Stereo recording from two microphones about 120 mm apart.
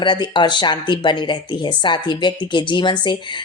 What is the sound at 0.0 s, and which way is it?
Speech, 40° left (ahead or behind).